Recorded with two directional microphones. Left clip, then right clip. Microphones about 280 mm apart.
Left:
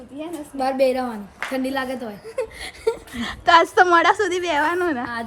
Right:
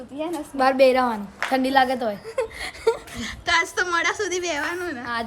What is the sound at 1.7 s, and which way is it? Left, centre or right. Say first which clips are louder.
Speech: right 7 dB; right.